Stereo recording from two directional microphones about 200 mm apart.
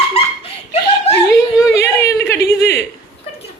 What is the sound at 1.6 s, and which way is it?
Yodeling, 15° left (ahead or behind).